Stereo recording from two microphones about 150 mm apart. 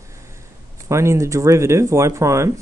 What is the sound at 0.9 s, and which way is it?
Speech, 20° right (ahead or behind).